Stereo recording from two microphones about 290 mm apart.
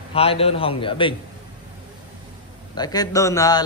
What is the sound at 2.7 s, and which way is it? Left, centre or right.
Speech, centre.